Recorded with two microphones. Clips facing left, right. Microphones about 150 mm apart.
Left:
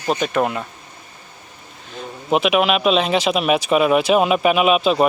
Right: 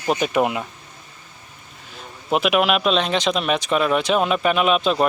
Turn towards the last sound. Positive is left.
turn(degrees=5)  # may be behind; listen again after turning